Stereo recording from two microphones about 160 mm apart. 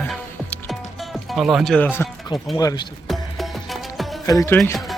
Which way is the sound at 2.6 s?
20° left (ahead or behind).